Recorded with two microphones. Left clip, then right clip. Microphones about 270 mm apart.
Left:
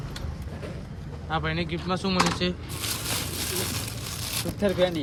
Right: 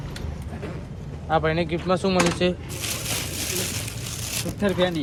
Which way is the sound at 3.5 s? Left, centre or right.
Centre.